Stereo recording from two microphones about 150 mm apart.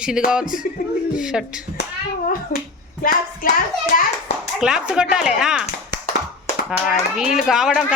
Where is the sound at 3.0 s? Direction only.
70° left (ahead or behind).